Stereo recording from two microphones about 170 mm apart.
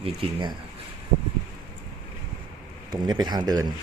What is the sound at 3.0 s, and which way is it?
Speech, 25° right (ahead or behind).